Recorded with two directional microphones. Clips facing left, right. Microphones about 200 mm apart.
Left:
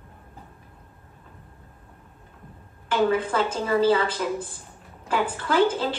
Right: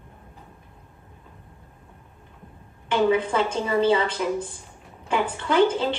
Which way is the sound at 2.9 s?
5° left (ahead or behind).